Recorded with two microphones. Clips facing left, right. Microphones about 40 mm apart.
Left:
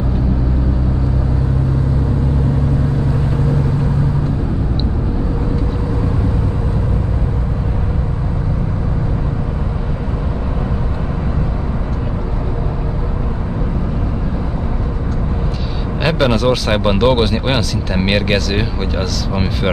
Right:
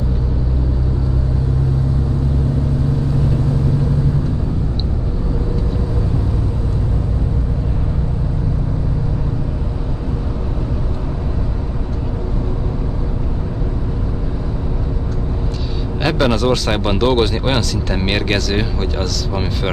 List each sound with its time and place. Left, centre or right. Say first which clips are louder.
16.0 s speech: left 1 dB; centre